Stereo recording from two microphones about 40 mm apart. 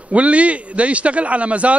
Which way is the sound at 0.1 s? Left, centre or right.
Right.